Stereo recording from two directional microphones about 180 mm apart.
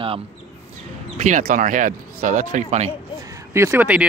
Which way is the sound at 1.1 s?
40° right (ahead or behind).